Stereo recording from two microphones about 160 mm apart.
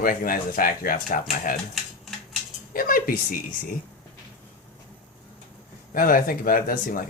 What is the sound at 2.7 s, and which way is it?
Speech, 65° left (ahead or behind).